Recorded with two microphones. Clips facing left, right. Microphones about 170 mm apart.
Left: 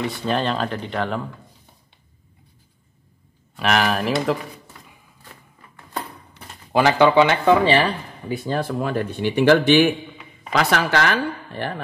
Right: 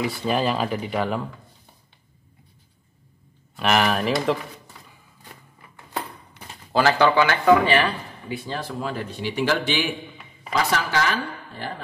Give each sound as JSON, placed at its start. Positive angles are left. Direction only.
{"t": 0.0, "sound": "speech", "side_deg": -5}
{"t": 3.5, "sound": "speech", "side_deg": 0}
{"t": 6.7, "sound": "speech", "side_deg": 20}
{"t": 8.3, "sound": "speech", "side_deg": 50}
{"t": 10.5, "sound": "speech", "side_deg": 75}